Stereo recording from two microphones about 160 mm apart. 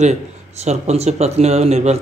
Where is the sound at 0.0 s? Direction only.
45° right (ahead or behind).